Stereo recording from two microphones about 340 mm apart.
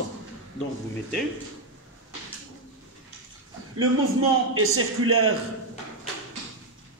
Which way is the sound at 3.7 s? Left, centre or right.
Right.